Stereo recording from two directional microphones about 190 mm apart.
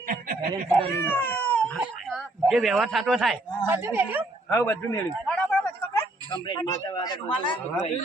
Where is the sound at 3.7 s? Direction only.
10° right (ahead or behind).